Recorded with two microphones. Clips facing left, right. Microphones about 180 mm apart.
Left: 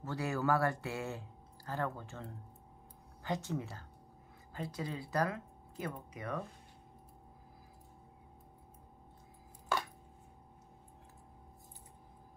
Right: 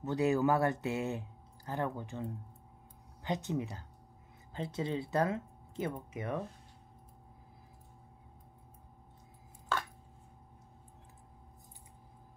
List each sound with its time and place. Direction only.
0.0 s speech: 20° right (ahead or behind)
9.7 s chopping: 10° left (ahead or behind)